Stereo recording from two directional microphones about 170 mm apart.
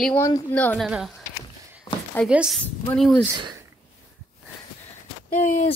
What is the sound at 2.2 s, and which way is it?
Speech, 5° right (ahead or behind).